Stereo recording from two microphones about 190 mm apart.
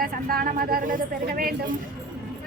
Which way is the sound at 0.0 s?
50° right (ahead or behind).